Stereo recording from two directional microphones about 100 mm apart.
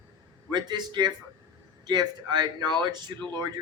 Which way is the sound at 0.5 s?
45° right (ahead or behind).